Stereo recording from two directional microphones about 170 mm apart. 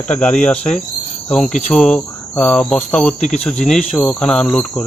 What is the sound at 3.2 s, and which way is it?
Speech, 40° left (ahead or behind).